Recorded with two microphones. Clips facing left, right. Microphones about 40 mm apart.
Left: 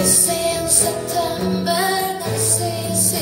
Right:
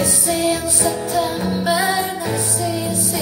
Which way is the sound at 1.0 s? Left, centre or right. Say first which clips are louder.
Right 1 dB; right.